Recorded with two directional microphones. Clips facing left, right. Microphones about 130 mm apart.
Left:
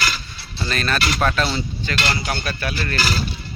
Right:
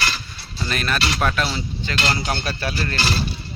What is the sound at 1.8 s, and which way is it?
Speech, 30° right (ahead or behind).